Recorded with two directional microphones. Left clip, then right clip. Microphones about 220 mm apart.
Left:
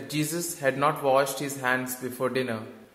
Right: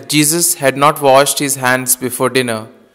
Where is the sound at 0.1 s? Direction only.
45° right (ahead or behind).